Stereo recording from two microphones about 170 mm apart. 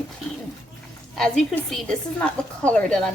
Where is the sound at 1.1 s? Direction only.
5° left (ahead or behind).